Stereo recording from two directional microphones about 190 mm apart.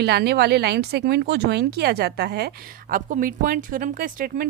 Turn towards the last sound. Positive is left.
turn(degrees=-50)  # may be behind; listen again after turning